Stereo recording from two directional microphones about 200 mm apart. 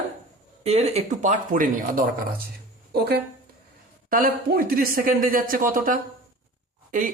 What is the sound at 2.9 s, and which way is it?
Speech, 55° right (ahead or behind).